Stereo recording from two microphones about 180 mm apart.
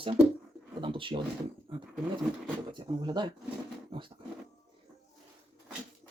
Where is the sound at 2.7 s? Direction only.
25° right (ahead or behind).